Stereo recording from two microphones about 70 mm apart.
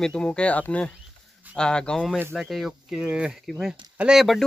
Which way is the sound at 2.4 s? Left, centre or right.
Centre.